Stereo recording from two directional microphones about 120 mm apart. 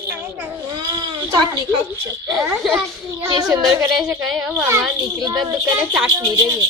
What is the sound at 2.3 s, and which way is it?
Speech, 5° right (ahead or behind).